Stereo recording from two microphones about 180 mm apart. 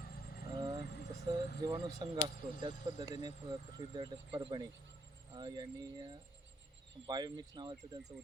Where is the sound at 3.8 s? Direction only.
25° right (ahead or behind).